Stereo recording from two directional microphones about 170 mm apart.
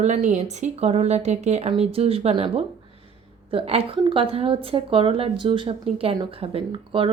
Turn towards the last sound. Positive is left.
turn(degrees=-30)  # may be behind; listen again after turning